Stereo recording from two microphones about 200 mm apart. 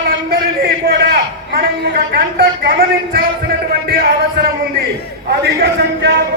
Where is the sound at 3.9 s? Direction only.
50° right (ahead or behind).